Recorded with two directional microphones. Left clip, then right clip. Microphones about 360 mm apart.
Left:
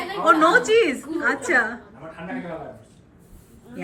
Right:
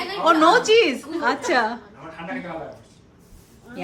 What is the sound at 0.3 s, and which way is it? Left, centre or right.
A woman's voice, centre.